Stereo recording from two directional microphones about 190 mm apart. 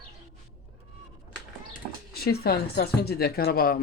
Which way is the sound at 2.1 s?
55° left (ahead or behind).